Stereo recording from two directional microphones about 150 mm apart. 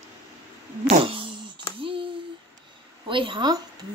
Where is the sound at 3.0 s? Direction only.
35° right (ahead or behind).